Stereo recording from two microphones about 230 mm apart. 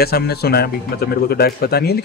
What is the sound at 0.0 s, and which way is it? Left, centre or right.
Speech, left.